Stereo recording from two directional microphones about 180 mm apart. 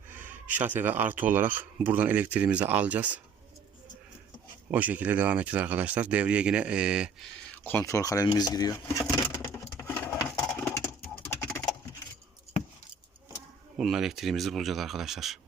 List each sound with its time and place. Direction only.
0.1 s speech: 10° right (ahead or behind)
4.7 s speech: 10° right (ahead or behind)
7.5 s vehicle: 10° left (ahead or behind)
11.2 s pigeon: 15° left (ahead or behind)
13.7 s speech: centre (ahead or behind)